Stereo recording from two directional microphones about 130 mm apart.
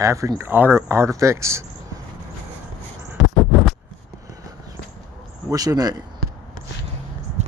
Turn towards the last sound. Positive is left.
turn(degrees=-60)  # may be behind; listen again after turning